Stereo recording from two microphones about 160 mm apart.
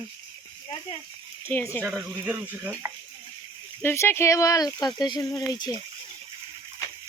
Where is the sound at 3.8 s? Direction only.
15° left (ahead or behind).